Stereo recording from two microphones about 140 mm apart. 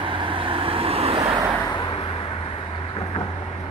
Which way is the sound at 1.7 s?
35° left (ahead or behind).